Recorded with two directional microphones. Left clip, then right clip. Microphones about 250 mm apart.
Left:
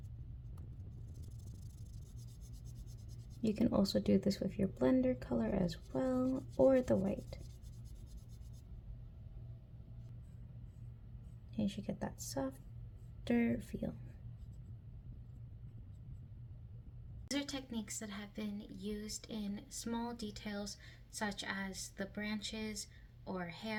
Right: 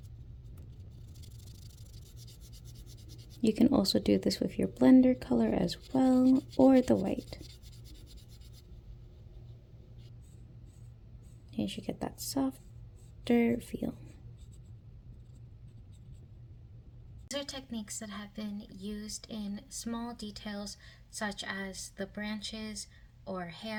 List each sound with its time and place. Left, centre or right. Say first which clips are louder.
3.4 s speech: right 8 dB; right
11.5 s speech: right 5 dB; right
17.2 s a woman's voice: right 3 dB; centre